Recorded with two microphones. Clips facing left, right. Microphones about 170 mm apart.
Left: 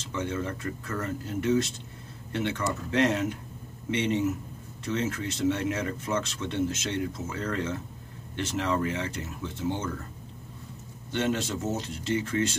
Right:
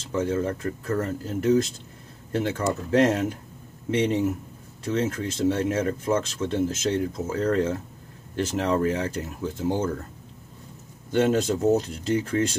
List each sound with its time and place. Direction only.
0.1 s speech: 35° right (ahead or behind)
11.1 s speech: 40° right (ahead or behind)